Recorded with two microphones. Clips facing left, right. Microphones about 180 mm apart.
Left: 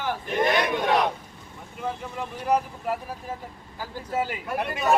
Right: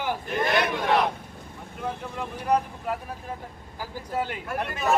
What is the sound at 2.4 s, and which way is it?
Speech, 5° left (ahead or behind).